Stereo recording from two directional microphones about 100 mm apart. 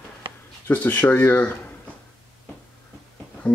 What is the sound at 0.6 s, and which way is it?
Speech, 15° left (ahead or behind).